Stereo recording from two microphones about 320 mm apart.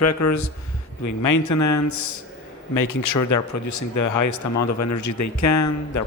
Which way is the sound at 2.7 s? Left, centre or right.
Left.